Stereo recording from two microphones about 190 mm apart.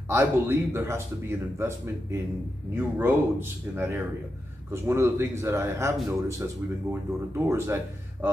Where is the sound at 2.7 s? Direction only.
10° right (ahead or behind).